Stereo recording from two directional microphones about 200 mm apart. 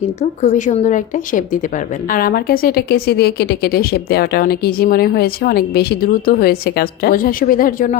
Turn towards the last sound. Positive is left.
turn(degrees=45)  # may be behind; listen again after turning